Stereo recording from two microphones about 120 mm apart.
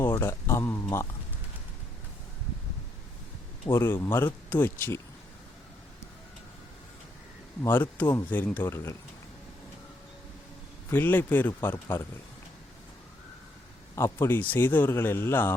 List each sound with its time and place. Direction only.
0.2 s speech: 20° left (ahead or behind)
3.7 s speech: 20° left (ahead or behind)
7.6 s speech: 15° left (ahead or behind)
10.8 s speech: 15° left (ahead or behind)
13.9 s speech: 20° left (ahead or behind)